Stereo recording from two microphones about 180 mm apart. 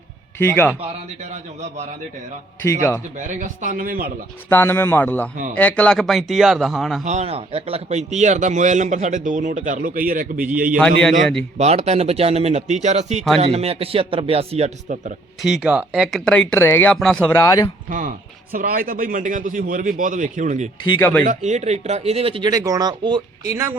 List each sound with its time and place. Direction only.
0.3 s a man's voice: 10° left (ahead or behind)
3.2 s a man's voice: 45° right (ahead or behind)
4.4 s a man's voice: 10° left (ahead or behind)
7.0 s a man's voice: 40° right (ahead or behind)
11.5 s speech: 35° right (ahead or behind)
15.4 s speech: centre (ahead or behind); by 17.7 s 20° left (ahead or behind)
17.8 s a man's voice: 45° right (ahead or behind)
20.8 s a man's voice: 10° left (ahead or behind)
21.2 s speech: 40° right (ahead or behind); by 23.7 s 15° right (ahead or behind)